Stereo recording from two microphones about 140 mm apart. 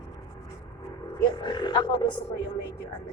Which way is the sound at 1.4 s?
30° left (ahead or behind).